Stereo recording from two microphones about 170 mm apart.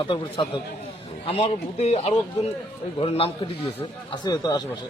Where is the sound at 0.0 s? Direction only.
30° left (ahead or behind).